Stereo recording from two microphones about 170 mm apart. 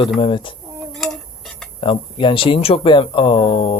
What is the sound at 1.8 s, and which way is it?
Speech, 30° left (ahead or behind).